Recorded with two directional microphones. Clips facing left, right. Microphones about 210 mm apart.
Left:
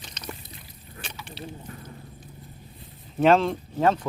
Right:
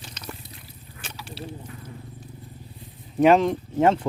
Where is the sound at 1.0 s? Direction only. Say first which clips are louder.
Right 2 dB; 5° right (ahead or behind).